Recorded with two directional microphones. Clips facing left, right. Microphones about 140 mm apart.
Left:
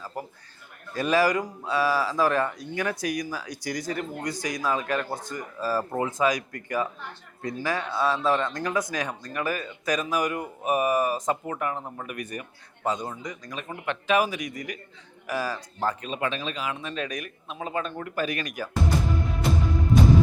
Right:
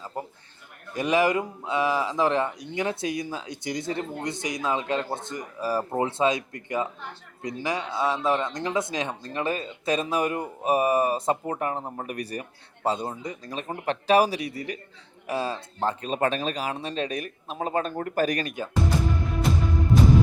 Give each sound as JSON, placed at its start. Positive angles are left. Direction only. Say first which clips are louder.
{"t": 0.0, "sound": "a sound", "louder": "right 1 dB", "side_deg": -25}
{"t": 0.9, "sound": "speech", "louder": "even", "side_deg": -20}
{"t": 6.0, "sound": "speech", "louder": "right 2 dB", "side_deg": -30}
{"t": 16.0, "sound": "a man's voice", "louder": "right 4 dB", "side_deg": -45}
{"t": 19.1, "sound": "music", "louder": "even", "side_deg": 0}